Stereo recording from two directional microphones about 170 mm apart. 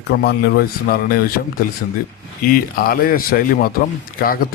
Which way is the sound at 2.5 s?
60° left (ahead or behind).